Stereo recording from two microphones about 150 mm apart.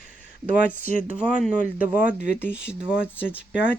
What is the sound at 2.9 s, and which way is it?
Speech, 10° right (ahead or behind).